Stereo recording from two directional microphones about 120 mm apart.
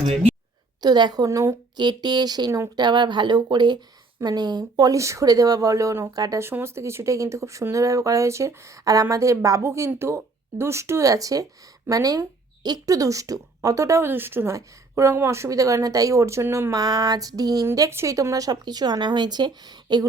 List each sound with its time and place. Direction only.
0.8 s speech: 35° right (ahead or behind)